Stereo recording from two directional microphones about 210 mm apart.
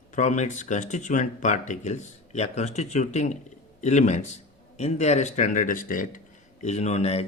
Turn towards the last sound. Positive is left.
turn(degrees=30)  # may be behind; listen again after turning